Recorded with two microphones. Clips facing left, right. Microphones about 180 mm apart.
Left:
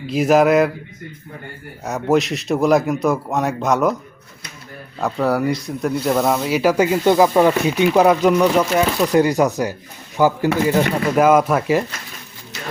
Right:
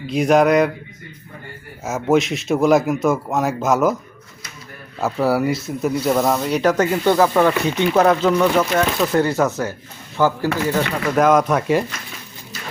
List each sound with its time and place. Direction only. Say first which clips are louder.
0.1 s a man's voice: left 1 dB; 5° left (ahead or behind)
1.8 s a man's voice: even; centre (ahead or behind)
4.9 s speech: right 1 dB; 5° right (ahead or behind)